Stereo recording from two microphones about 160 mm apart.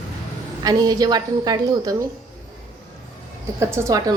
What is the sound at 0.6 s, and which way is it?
A woman's voice, 25° right (ahead or behind).